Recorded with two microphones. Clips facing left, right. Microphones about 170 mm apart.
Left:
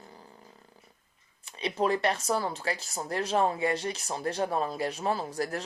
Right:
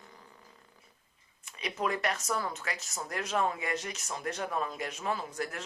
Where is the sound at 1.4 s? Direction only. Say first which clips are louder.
Left 5 dB; 30° left (ahead or behind).